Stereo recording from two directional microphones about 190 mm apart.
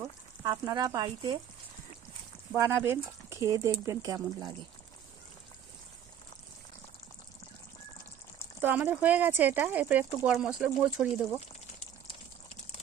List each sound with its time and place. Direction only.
0.4 s speech: 20° right (ahead or behind)
2.5 s speech: 15° right (ahead or behind)
8.5 s speech: 10° right (ahead or behind)